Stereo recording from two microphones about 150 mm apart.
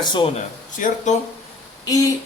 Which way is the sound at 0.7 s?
60° left (ahead or behind).